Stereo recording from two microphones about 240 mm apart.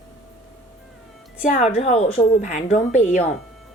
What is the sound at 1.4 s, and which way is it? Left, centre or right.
A woman's voice, left.